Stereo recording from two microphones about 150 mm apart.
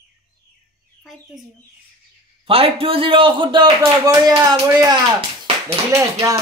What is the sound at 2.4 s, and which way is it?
Speech, 40° right (ahead or behind).